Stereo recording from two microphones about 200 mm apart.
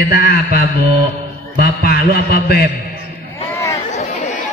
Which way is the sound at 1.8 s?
50° left (ahead or behind).